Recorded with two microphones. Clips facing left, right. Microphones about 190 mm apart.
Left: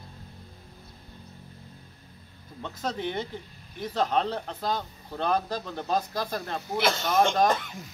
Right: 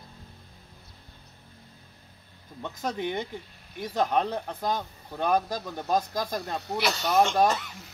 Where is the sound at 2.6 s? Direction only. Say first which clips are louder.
Right 1 dB; 15° right (ahead or behind).